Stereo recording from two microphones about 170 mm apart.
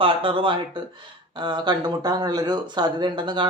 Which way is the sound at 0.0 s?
30° right (ahead or behind).